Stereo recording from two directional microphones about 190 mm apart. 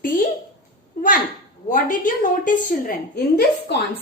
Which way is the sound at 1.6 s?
45° left (ahead or behind).